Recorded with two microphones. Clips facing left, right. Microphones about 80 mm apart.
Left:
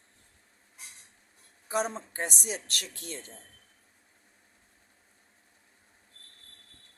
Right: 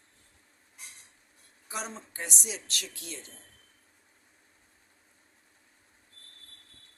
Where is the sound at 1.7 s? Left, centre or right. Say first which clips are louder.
Left 8 dB; left.